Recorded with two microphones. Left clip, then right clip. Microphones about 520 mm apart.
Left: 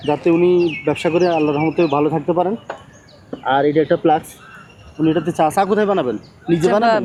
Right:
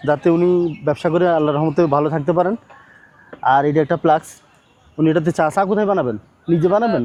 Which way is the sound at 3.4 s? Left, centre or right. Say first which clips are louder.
Right 1 dB; right.